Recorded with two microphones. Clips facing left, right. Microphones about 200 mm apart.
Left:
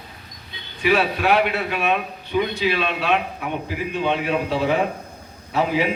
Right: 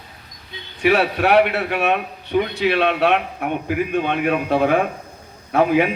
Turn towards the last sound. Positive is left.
turn(degrees=-55)  # may be behind; listen again after turning